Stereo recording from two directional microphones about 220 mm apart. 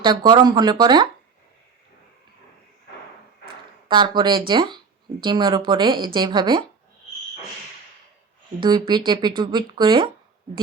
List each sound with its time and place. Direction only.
0.0 s speech: 20° right (ahead or behind)
3.8 s speech: 20° right (ahead or behind)
8.6 s speech: 20° right (ahead or behind)